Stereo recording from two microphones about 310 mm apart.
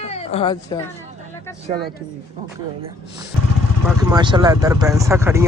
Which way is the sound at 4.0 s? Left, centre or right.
Centre.